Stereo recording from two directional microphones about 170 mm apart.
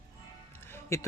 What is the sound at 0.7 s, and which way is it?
Music, 15° left (ahead or behind).